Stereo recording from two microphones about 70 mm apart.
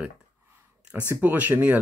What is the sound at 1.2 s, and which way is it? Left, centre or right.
Speech, right.